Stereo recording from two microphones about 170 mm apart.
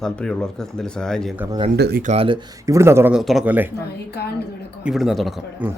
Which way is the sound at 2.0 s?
35° right (ahead or behind).